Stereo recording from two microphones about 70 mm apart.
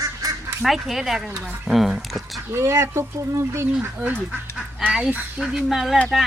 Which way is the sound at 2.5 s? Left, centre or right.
Right.